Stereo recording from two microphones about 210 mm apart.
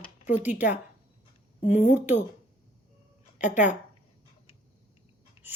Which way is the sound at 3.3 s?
35° left (ahead or behind).